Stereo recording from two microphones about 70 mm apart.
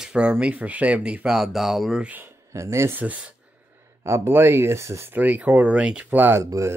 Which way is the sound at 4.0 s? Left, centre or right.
Right.